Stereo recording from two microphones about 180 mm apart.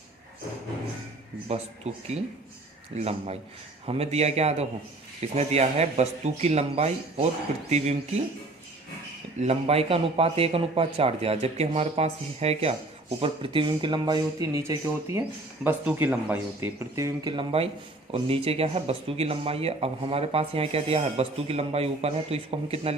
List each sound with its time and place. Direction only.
1.5 s speech: 35° right (ahead or behind)
9.4 s a man's voice: 35° right (ahead or behind); by 17.3 s 15° right (ahead or behind)
17.3 s speech: 35° right (ahead or behind)